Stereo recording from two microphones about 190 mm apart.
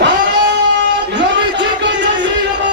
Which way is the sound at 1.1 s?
70° right (ahead or behind).